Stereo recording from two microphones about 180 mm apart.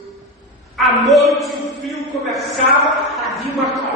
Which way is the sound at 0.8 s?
Centre (ahead or behind).